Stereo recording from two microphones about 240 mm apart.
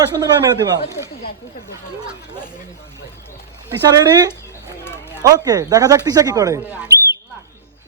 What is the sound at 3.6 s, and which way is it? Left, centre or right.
Speech, centre.